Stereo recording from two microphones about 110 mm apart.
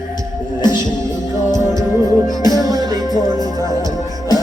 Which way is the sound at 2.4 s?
40° left (ahead or behind).